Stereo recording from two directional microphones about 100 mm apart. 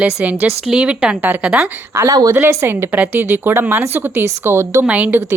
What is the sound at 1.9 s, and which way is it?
Speech, 35° right (ahead or behind).